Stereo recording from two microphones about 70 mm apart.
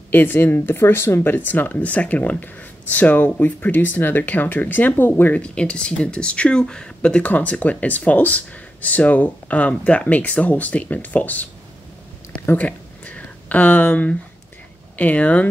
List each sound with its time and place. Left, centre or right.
0.1 s speech: left
12.5 s a sound: left
15.0 s speech: left